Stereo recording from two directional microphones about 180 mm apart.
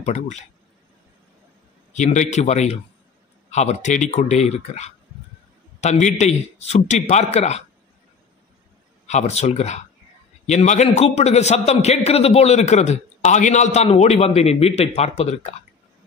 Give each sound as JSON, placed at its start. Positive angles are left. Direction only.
{"t": 0.0, "sound": "a man's voice", "side_deg": 40}
{"t": 2.3, "sound": "a man's voice", "side_deg": 40}
{"t": 9.0, "sound": "a man's voice", "side_deg": 40}